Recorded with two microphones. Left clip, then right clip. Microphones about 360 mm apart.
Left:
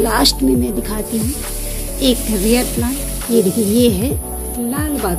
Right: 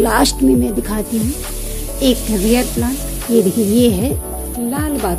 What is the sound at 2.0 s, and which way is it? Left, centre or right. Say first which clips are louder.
A woman's voice: right 1 dB; centre.